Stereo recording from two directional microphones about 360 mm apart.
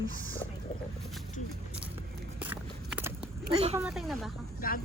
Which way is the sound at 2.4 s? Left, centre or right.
Centre.